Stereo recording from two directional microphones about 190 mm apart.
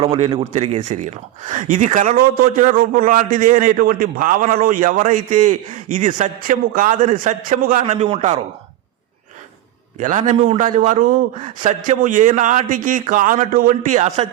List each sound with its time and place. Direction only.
0.0 s a man's voice: 30° right (ahead or behind)
10.0 s a man's voice: 40° right (ahead or behind)